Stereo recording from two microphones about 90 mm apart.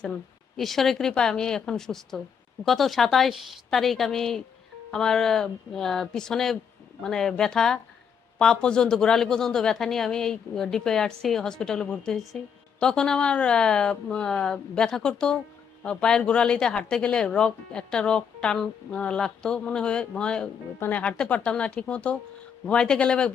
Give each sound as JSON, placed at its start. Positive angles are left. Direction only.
{"t": 0.0, "sound": "a man's voice", "side_deg": 5}